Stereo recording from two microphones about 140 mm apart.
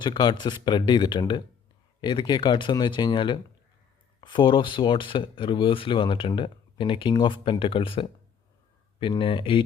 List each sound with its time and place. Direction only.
0.0 s speech: 30° left (ahead or behind)